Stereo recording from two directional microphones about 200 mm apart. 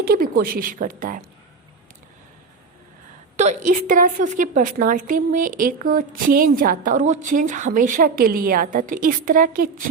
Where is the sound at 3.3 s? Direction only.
35° right (ahead or behind).